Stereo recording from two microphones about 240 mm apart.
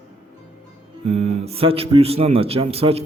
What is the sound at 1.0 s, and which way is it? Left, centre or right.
Speech, right.